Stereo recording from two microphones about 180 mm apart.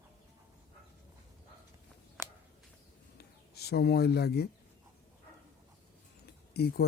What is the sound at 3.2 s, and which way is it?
Bird, 65° left (ahead or behind).